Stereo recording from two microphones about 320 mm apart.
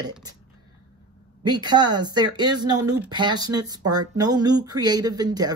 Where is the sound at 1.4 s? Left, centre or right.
Centre.